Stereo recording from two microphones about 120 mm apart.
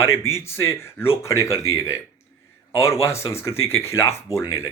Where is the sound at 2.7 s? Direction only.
25° left (ahead or behind).